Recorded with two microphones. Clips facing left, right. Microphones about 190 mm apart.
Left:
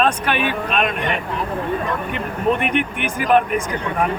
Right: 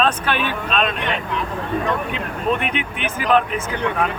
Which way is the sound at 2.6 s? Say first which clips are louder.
Left 4 dB; 55° left (ahead or behind).